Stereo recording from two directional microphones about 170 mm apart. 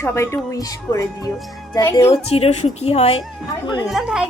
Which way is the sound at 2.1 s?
35° left (ahead or behind).